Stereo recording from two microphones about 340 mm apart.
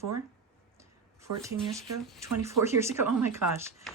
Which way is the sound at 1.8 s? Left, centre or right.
Centre.